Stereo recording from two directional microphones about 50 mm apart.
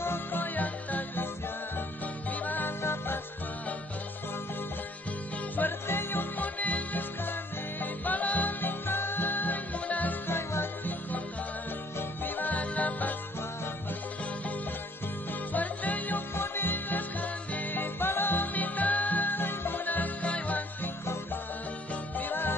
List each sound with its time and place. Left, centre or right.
0.0 s music: left
2.3 s music: left
2.8 s music: left
5.6 s music: left
6.3 s music: left
10.2 s music: left
12.0 s music: left
15.5 s music: left
16.3 s music: left
17.9 s music: left
22.1 s music: left